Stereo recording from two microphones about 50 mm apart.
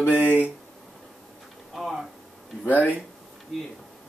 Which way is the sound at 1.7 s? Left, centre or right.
Centre.